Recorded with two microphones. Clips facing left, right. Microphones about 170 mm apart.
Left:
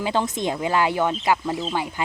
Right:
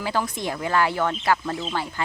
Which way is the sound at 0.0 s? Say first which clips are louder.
Left 3 dB; 20° left (ahead or behind).